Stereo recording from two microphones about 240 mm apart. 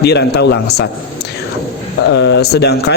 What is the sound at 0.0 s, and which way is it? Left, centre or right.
Speech, left.